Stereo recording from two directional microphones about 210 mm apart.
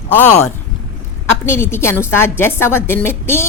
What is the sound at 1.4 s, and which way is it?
Speech, 10° left (ahead or behind).